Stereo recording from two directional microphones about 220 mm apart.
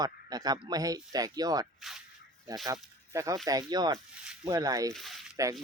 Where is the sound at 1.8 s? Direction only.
Centre (ahead or behind).